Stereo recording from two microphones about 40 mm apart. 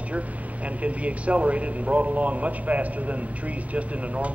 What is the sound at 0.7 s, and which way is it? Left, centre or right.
Speech, right.